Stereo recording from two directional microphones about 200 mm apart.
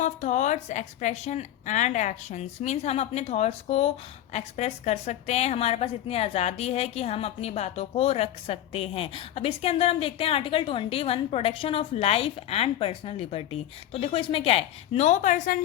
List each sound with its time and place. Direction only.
0.0 s a woman's voice: 35° left (ahead or behind)